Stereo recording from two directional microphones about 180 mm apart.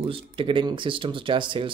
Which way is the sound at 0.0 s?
30° right (ahead or behind).